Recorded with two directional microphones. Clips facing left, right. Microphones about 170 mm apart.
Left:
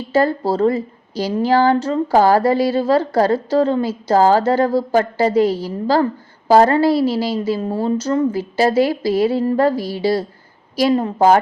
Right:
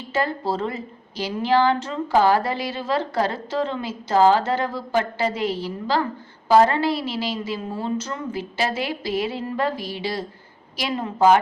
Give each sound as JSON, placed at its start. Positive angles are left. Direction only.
{"t": 0.1, "sound": "a woman's voice", "side_deg": 35}